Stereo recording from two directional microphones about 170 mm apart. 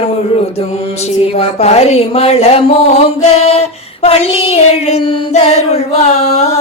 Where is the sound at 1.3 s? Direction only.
35° left (ahead or behind).